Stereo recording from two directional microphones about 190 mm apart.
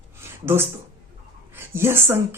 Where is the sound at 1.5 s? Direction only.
10° right (ahead or behind).